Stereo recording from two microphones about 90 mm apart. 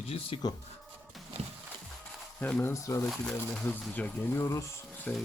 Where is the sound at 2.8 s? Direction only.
35° left (ahead or behind).